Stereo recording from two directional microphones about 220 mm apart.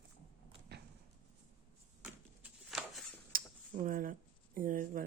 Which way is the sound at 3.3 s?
40° right (ahead or behind).